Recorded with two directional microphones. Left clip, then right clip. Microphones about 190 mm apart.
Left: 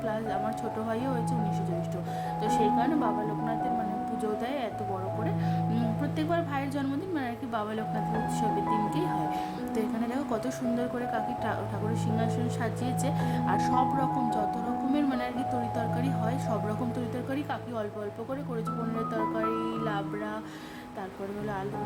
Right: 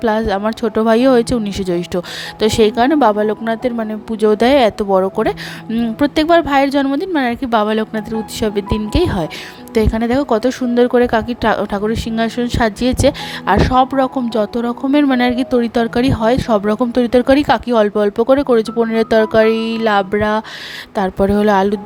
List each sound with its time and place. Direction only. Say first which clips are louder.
0.0 s speech: right 15 dB; 50° right (ahead or behind)
5.7 s speech: right 16 dB; 50° right (ahead or behind)
8.9 s speech: right 12 dB; 55° right (ahead or behind)